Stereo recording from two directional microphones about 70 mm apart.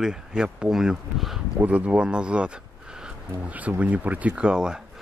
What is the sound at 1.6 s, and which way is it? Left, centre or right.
Speech, centre.